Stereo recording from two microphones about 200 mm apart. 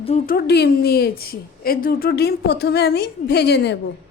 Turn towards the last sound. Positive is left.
turn(degrees=60)  # may be behind; listen again after turning